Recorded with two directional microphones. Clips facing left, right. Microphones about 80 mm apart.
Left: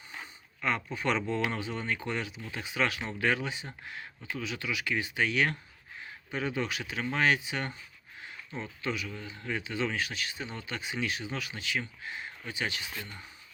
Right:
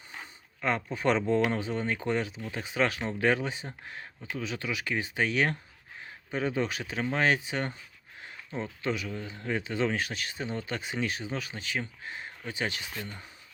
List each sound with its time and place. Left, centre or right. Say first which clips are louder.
0.6 s speech: right 3 dB; right